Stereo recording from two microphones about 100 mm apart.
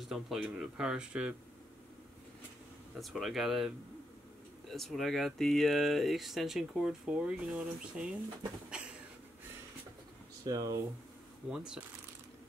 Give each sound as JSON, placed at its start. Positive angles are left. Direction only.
{"t": 0.1, "sound": "speech", "side_deg": -5}
{"t": 3.0, "sound": "speech", "side_deg": 0}
{"t": 8.6, "sound": "a sound", "side_deg": -10}
{"t": 10.4, "sound": "speech", "side_deg": -35}
{"t": 11.5, "sound": "speech", "side_deg": -10}